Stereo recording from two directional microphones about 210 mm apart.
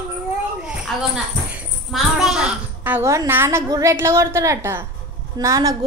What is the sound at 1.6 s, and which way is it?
A child's voice, centre (ahead or behind).